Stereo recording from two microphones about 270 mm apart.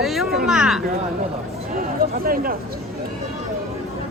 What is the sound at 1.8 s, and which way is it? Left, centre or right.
Speech, right.